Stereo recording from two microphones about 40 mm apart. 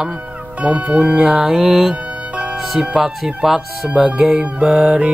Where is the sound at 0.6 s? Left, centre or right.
Right.